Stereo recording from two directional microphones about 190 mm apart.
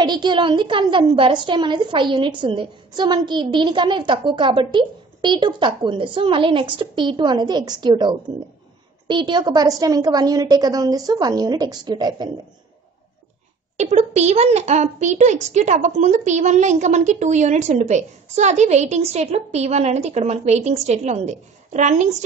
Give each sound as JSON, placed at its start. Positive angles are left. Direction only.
{"t": 0.0, "sound": "a woman's voice", "side_deg": -25}
{"t": 13.7, "sound": "a child's voice", "side_deg": -35}